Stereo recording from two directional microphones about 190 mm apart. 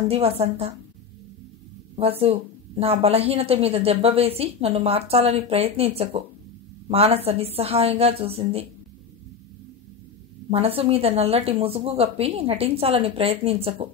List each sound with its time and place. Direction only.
0.1 s a woman's voice: 30° right (ahead or behind)
2.0 s a woman's voice: 30° right (ahead or behind)
10.5 s a woman's voice: 30° right (ahead or behind)